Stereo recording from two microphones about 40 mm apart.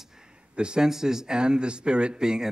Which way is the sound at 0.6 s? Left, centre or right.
Right.